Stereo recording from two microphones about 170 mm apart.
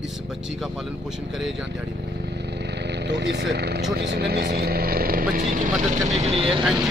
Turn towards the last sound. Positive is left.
turn(degrees=-5)  # may be behind; listen again after turning